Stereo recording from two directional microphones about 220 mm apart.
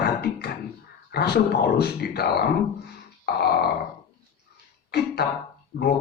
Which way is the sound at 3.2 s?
45° left (ahead or behind).